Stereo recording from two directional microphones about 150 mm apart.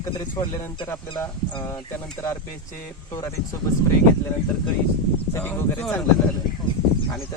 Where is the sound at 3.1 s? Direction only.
25° left (ahead or behind).